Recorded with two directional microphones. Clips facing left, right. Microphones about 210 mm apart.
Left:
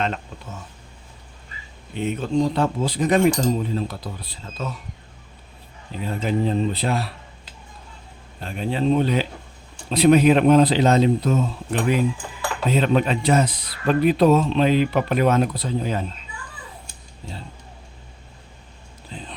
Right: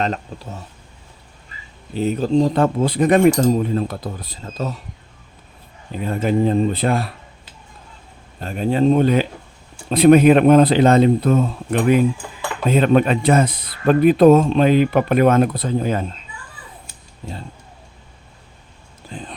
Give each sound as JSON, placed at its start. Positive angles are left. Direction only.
{"t": 0.0, "sound": "speech", "side_deg": -35}
{"t": 1.9, "sound": "a man's voice", "side_deg": -35}
{"t": 6.0, "sound": "a man's voice", "side_deg": -50}
{"t": 8.4, "sound": "a man's voice", "side_deg": -45}
{"t": 19.1, "sound": "a sound", "side_deg": -50}